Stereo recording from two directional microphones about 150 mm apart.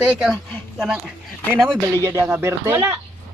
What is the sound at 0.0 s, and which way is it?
Speech, 5° right (ahead or behind).